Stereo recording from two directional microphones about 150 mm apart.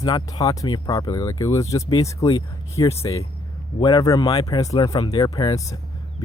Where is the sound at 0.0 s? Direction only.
25° left (ahead or behind).